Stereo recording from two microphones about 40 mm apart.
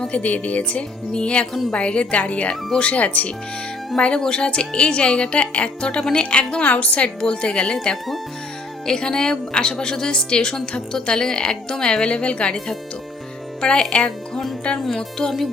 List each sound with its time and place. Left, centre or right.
0.1 s speech: left
3.9 s a woman's voice: left
7.2 s a woman's voice: left
13.6 s speech: left
14.8 s speech: centre